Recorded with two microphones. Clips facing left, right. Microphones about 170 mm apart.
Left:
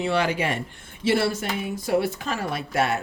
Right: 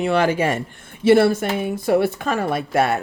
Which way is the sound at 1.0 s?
55° right (ahead or behind).